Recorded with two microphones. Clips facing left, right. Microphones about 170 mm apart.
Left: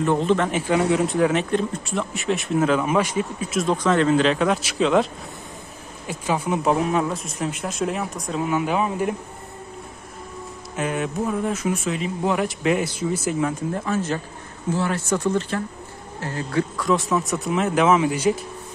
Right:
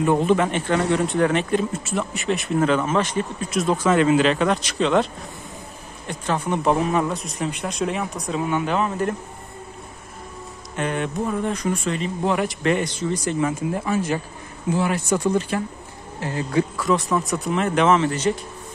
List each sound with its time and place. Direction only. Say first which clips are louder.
0.0 s speech: right 1 dB; 10° right (ahead or behind)
0.5 s speech: left 1 dB; 5° left (ahead or behind)
6.0 s speech: even; 10° left (ahead or behind)
10.8 s speech: even; 5° left (ahead or behind); by 16.6 s 15° right (ahead or behind)
16.7 s speech: even; centre (ahead or behind)